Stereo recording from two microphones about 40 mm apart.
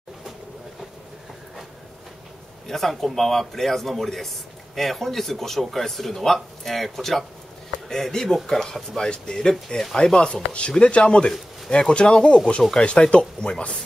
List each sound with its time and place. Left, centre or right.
2.7 s a man's voice: centre; by 13.7 s left